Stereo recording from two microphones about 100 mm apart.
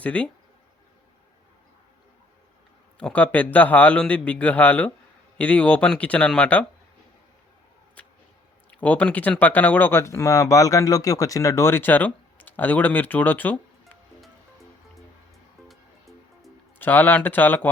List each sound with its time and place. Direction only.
0.0 s a man's voice: 15° left (ahead or behind)
3.0 s a man's voice: 15° left (ahead or behind)
8.0 s whip: 15° left (ahead or behind)
8.8 s speech: 15° left (ahead or behind)
15.6 s music: centre (ahead or behind)
16.7 s speech: 20° left (ahead or behind)